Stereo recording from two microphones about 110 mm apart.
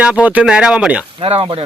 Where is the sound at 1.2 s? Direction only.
60° right (ahead or behind).